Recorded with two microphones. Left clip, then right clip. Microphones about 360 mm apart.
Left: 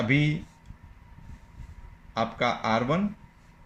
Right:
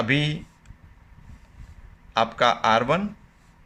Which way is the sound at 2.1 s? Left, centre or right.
Right.